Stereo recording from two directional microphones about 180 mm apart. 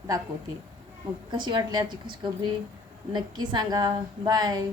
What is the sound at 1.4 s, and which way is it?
Speech, 25° right (ahead or behind).